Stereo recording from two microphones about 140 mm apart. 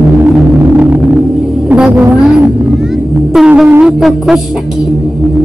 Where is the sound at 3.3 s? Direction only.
5° right (ahead or behind).